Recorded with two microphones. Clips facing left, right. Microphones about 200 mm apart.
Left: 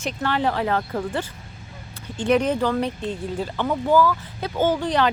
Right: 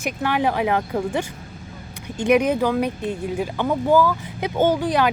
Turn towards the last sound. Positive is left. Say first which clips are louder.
# right 2 dB
turn(degrees=-10)  # may be behind; listen again after turning